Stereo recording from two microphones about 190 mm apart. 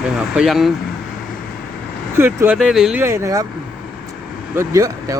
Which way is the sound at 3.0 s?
15° right (ahead or behind).